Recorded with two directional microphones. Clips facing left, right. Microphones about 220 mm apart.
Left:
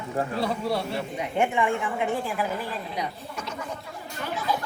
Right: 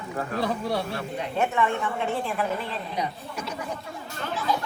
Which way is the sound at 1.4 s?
10° left (ahead or behind).